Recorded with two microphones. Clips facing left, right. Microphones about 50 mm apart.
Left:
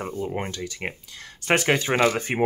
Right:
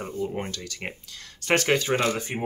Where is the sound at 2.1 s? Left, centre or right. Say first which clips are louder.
Left 3 dB; left.